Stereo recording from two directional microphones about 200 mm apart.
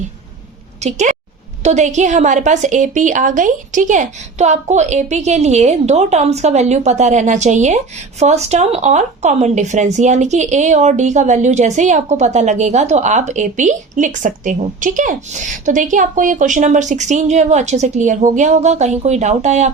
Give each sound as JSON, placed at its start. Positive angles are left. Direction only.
{"t": 0.8, "sound": "speech", "side_deg": -35}